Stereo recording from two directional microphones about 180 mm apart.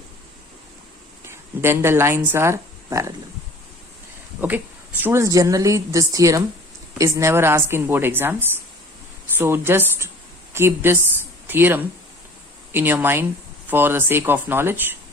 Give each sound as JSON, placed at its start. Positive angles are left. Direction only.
{"t": 1.2, "sound": "speech", "side_deg": -15}
{"t": 4.4, "sound": "a woman's voice", "side_deg": -10}